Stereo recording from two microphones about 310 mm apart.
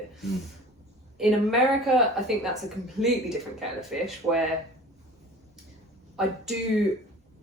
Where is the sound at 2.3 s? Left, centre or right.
Centre.